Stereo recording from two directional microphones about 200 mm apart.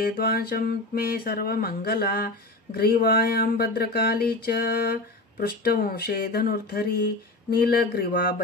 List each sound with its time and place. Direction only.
0.0 s mantra: 50° left (ahead or behind)